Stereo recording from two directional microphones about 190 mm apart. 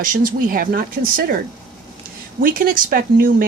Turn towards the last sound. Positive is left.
turn(degrees=-45)  # may be behind; listen again after turning